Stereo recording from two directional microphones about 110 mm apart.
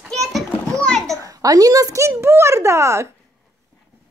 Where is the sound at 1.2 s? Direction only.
35° right (ahead or behind).